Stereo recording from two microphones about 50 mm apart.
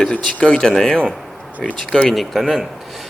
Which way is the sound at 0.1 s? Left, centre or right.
Left.